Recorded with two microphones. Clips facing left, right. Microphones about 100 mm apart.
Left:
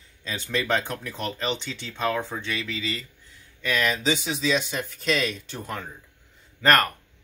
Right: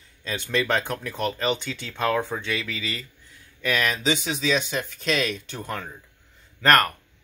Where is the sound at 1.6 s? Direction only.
30° left (ahead or behind).